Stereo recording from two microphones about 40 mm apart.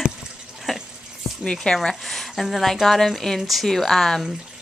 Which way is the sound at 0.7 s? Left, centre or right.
Centre.